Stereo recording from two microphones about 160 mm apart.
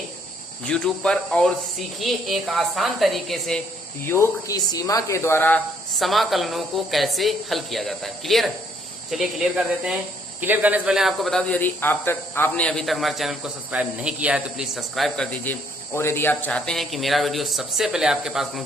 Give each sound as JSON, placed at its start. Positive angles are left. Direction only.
{"t": 0.6, "sound": "speech", "side_deg": 5}
{"t": 4.0, "sound": "speech", "side_deg": 15}
{"t": 6.0, "sound": "speech", "side_deg": 0}